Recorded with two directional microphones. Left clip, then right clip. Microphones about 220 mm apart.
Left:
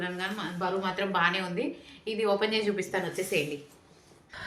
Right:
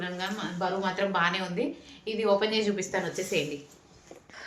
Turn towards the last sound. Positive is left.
turn(degrees=0)  # may be behind; listen again after turning